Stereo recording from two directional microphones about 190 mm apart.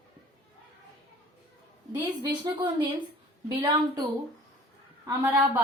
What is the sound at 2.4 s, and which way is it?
A woman's voice, 25° right (ahead or behind).